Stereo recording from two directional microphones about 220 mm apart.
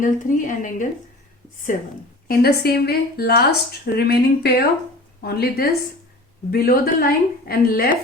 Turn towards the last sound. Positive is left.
turn(degrees=45)  # may be behind; listen again after turning